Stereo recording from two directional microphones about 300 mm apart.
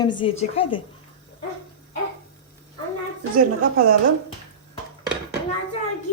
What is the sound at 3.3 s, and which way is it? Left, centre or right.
Speech, right.